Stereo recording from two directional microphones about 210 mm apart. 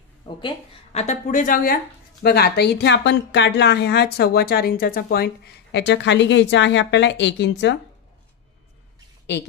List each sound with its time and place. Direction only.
0.2 s a woman's voice: 25° left (ahead or behind); by 7.8 s 55° left (ahead or behind)